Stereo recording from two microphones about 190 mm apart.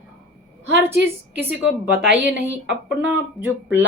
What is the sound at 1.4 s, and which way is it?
A woman's voice, 10° right (ahead or behind).